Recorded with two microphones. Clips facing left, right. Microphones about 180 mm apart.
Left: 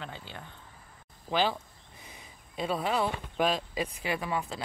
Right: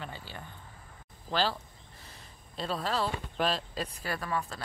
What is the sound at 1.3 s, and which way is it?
Speech, 15° left (ahead or behind).